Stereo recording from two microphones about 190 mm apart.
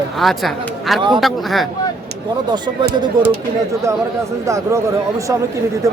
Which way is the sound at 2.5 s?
25° right (ahead or behind).